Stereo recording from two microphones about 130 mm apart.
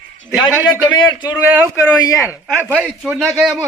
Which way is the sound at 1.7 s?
25° left (ahead or behind).